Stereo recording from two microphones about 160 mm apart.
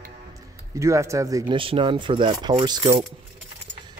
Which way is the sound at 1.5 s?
35° right (ahead or behind).